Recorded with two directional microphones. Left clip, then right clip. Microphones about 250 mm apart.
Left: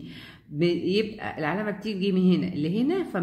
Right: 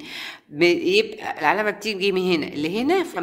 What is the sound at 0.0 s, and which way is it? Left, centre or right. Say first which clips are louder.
Speech: right 11 dB; right.